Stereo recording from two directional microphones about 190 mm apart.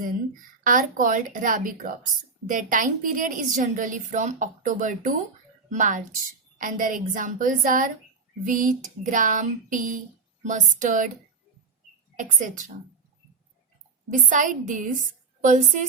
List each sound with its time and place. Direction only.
0.6 s a woman's voice: 45° right (ahead or behind)
12.1 s a woman's voice: 45° right (ahead or behind)
14.1 s a woman's voice: 45° right (ahead or behind)